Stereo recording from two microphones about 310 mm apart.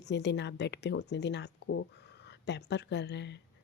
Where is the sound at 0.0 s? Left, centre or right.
Left.